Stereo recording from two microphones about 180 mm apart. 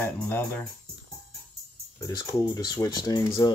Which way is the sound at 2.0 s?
20° left (ahead or behind).